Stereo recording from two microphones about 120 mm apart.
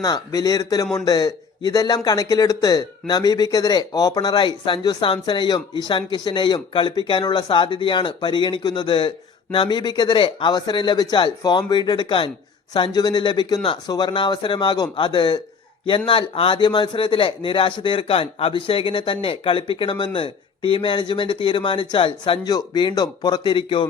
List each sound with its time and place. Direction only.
0.0 s speech: 30° left (ahead or behind)